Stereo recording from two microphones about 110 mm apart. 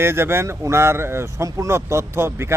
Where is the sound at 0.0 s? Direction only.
20° right (ahead or behind).